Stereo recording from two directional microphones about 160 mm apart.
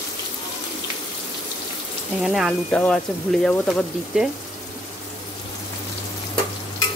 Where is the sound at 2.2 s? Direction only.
Centre (ahead or behind).